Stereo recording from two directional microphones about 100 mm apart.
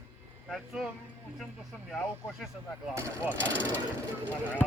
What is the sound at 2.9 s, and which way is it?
Speech, 30° right (ahead or behind).